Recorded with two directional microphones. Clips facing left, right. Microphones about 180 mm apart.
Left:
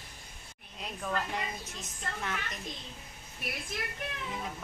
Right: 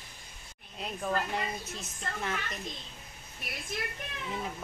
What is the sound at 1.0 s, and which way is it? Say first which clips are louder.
Speech: right 2 dB; 30° right (ahead or behind).